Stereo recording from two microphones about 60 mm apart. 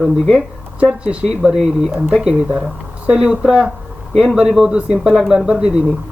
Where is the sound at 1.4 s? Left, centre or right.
Centre.